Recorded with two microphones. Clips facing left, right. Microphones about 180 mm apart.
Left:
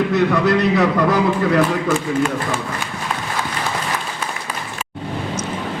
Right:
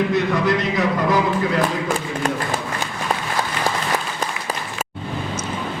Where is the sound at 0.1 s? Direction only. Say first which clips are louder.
Left 3 dB; 70° left (ahead or behind).